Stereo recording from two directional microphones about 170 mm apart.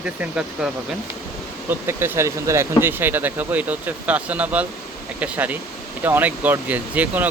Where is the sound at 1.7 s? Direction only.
15° right (ahead or behind).